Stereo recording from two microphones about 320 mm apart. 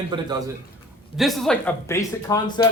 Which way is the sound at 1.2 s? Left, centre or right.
Centre.